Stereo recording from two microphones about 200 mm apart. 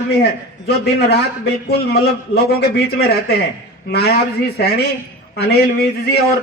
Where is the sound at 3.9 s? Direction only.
55° left (ahead or behind).